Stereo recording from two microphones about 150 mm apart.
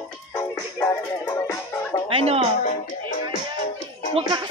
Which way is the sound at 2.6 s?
65° left (ahead or behind).